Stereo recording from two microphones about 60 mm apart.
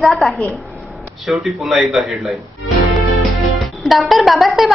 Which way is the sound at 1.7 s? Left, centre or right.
Centre.